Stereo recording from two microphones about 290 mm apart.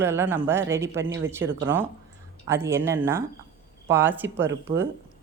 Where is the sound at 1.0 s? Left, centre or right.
Right.